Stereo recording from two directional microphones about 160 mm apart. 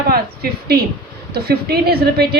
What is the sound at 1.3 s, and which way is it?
Speech, 80° right.